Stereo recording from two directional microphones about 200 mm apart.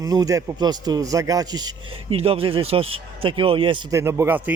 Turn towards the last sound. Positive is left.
turn(degrees=-10)  # may be behind; listen again after turning